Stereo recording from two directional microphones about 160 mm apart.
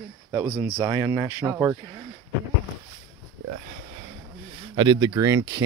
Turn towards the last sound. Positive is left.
turn(degrees=-20)  # may be behind; listen again after turning